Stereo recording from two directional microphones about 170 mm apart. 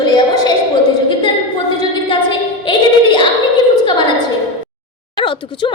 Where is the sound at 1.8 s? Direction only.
30° left (ahead or behind).